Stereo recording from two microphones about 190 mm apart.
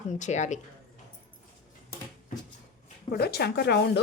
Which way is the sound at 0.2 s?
40° left (ahead or behind).